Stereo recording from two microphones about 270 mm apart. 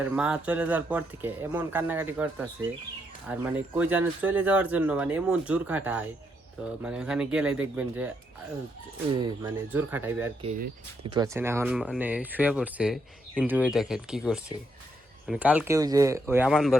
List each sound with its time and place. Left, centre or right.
0.0 s speech: centre
9.1 s speech: centre